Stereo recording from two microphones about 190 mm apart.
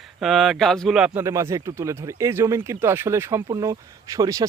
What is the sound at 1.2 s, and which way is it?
Speech, 15° right (ahead or behind).